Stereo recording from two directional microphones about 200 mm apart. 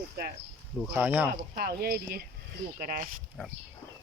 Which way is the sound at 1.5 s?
50° right (ahead or behind).